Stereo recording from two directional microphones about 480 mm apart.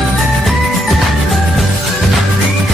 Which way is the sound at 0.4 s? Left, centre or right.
Centre.